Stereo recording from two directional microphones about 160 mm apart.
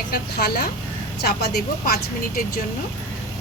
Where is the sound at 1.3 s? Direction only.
85° left.